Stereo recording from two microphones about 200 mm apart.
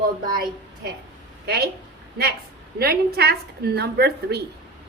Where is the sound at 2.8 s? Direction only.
50° right (ahead or behind).